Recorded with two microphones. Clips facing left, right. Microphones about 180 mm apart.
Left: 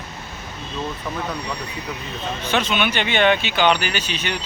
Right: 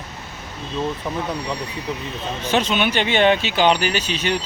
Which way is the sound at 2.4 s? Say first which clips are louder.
Right 2 dB; 40° right (ahead or behind).